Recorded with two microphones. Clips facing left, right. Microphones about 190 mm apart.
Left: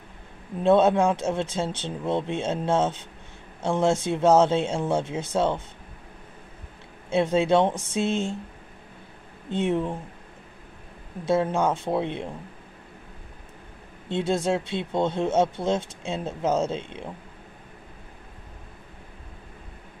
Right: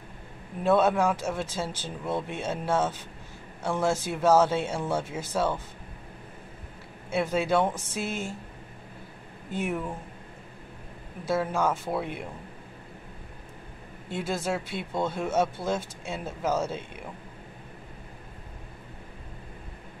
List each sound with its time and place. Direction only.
0.6 s speech: 25° left (ahead or behind)
7.1 s speech: 25° left (ahead or behind)
9.5 s speech: 25° left (ahead or behind)
11.2 s speech: 25° left (ahead or behind)
14.0 s speech: 25° left (ahead or behind)